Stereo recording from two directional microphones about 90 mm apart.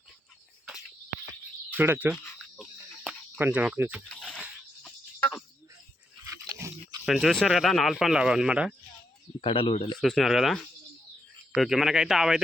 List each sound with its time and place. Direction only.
1.7 s speech: 20° right (ahead or behind)
2.1 s a sound: 30° left (ahead or behind)
3.0 s cricket: 15° right (ahead or behind)
3.4 s speech: 15° right (ahead or behind)
4.1 s a sound: 10° left (ahead or behind)
6.2 s pig: 35° right (ahead or behind)
7.0 s speech: centre (ahead or behind)
9.4 s speech: 70° left (ahead or behind)
10.0 s speech: centre (ahead or behind)